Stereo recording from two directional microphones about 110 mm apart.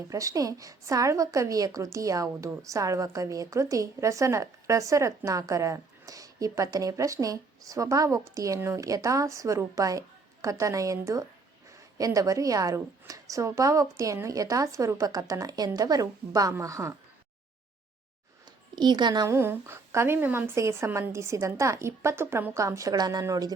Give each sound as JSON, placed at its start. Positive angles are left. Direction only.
{"t": 0.1, "sound": "a woman's voice", "side_deg": -30}
{"t": 18.8, "sound": "a woman's voice", "side_deg": -40}
{"t": 19.3, "sound": "a woman's voice", "side_deg": -20}